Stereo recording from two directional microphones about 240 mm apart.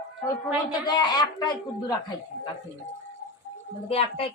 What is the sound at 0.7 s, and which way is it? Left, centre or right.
A man's voice, centre.